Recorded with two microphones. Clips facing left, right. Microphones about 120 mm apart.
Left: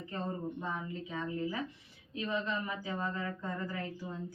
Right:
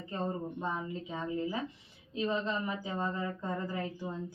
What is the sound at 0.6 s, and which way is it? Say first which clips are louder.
Speech: right 3 dB; 25° right (ahead or behind).